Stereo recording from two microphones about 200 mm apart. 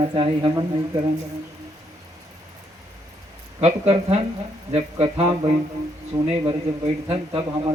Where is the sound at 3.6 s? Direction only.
30° right (ahead or behind).